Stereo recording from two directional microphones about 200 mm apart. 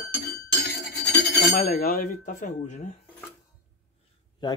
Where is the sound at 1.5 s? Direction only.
40° left (ahead or behind).